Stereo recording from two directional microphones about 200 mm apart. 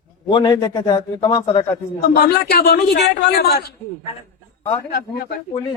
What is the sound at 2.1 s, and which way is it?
A man's voice, 50° left (ahead or behind).